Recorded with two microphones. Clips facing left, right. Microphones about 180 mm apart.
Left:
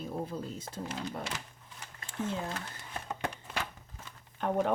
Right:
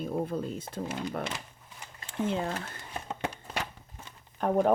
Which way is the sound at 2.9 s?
20° right (ahead or behind).